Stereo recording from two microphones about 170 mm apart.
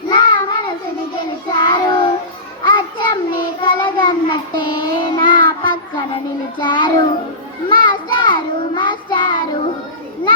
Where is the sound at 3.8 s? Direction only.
30° left (ahead or behind).